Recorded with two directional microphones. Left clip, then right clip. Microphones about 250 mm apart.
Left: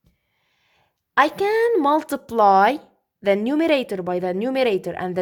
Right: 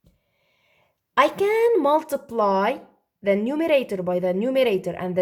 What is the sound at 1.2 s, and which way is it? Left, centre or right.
Speech, left.